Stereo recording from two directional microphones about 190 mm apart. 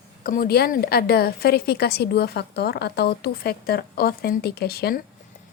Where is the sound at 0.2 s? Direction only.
50° left (ahead or behind).